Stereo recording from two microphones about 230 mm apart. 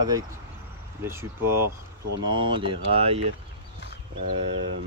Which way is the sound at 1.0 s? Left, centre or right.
Centre.